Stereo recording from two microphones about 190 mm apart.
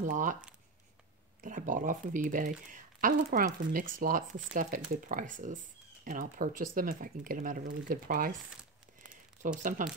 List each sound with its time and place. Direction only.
0.0 s speech: 45° right (ahead or behind)
1.4 s speech: 45° right (ahead or behind)
9.6 s speech: 45° right (ahead or behind)